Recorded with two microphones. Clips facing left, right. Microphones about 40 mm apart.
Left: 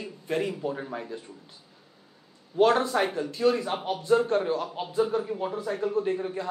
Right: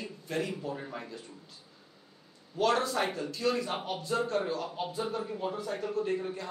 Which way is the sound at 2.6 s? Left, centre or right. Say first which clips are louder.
Left 6 dB; left.